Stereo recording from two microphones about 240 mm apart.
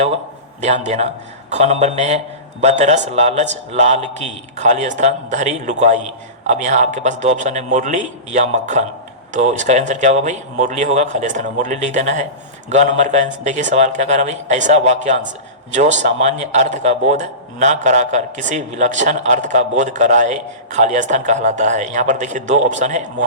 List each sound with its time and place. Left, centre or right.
0.6 s a man's voice: right